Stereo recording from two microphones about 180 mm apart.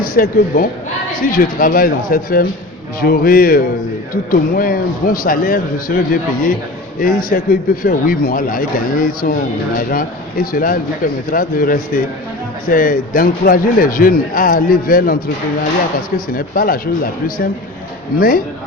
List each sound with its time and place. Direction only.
0.0 s a man's voice: 55° left (ahead or behind)